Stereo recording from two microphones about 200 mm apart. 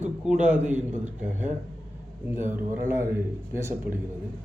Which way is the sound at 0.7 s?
35° right (ahead or behind).